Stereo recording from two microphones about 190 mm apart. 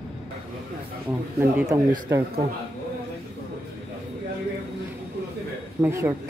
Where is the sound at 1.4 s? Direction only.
15° right (ahead or behind).